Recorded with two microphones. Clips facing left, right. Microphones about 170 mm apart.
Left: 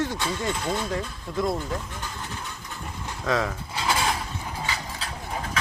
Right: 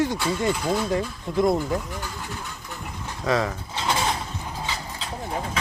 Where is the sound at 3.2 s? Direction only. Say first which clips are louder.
Right 2 dB; centre (ahead or behind).